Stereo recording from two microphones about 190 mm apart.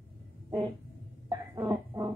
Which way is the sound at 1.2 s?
15° right (ahead or behind).